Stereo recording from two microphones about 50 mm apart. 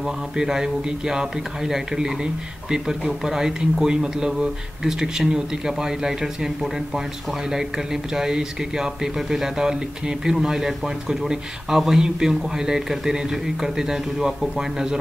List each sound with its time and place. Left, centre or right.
0.0 s speech: centre